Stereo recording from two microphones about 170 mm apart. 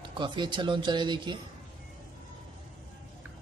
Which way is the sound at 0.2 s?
30° right (ahead or behind).